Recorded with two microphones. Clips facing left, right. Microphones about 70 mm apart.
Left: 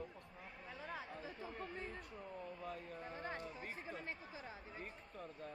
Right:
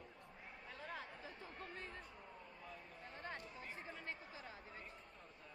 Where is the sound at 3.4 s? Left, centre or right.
Left.